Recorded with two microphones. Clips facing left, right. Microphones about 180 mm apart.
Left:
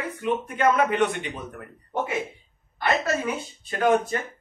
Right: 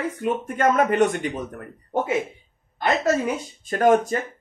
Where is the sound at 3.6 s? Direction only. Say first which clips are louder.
Right 4 dB; 45° right (ahead or behind).